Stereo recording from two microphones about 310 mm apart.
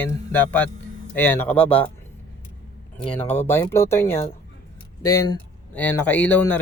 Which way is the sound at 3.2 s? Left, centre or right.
Centre.